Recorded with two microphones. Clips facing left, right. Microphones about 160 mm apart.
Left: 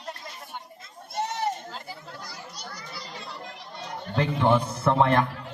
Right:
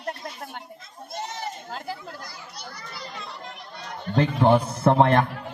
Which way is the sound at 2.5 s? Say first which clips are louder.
Even; 55° right (ahead or behind).